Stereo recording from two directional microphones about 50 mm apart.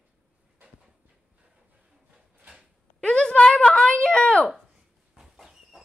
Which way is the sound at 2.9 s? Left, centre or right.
Left.